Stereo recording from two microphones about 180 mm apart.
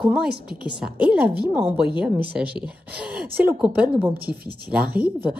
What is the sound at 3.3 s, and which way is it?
Speech, 55° right (ahead or behind).